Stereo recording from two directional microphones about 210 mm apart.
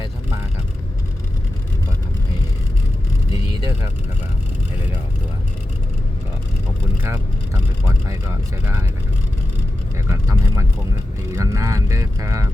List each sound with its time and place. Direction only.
3.3 s vehicle: 25° left (ahead or behind)
7.0 s speech: 10° right (ahead or behind)
10.1 s vehicle: 15° right (ahead or behind)
11.3 s speech: 15° right (ahead or behind)